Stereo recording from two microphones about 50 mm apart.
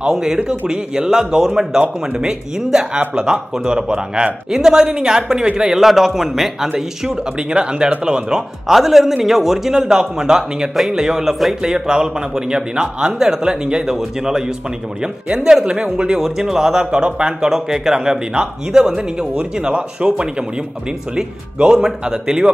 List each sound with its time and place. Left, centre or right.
0.0 s speech: centre
7.6 s speech: centre
21.7 s speech: centre